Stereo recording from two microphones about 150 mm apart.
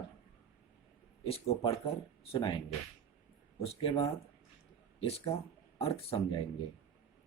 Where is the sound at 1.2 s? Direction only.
40° left (ahead or behind).